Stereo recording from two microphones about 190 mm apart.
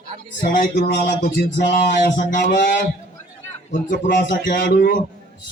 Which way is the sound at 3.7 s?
45° left (ahead or behind).